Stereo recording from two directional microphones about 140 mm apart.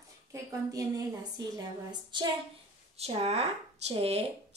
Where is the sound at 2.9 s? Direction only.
45° right (ahead or behind).